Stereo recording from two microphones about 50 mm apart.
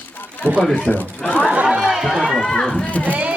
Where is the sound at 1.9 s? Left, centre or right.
Centre.